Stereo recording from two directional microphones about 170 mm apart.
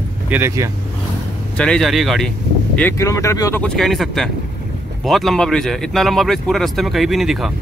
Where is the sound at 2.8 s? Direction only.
15° left (ahead or behind).